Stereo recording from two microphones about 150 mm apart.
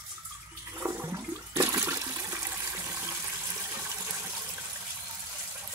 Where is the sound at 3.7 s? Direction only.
20° right (ahead or behind).